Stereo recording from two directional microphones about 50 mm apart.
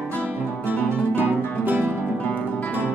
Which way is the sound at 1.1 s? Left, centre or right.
Right.